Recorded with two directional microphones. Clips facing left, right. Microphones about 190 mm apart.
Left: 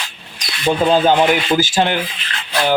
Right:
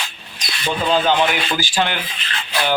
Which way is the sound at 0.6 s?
45° left (ahead or behind).